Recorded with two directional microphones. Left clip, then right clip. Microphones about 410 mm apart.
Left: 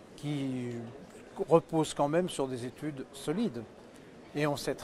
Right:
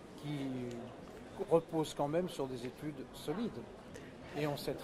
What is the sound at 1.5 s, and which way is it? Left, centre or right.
Speech, left.